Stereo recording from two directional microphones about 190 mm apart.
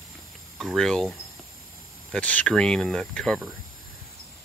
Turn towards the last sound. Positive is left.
turn(degrees=0)  # may be behind; listen again after turning